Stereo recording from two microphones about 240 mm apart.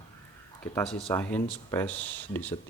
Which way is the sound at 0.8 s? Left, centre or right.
Centre.